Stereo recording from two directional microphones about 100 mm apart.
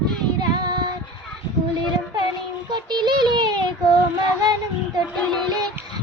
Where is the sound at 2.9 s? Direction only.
45° right (ahead or behind).